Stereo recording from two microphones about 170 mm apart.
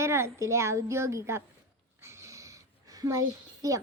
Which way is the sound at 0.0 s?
15° right (ahead or behind).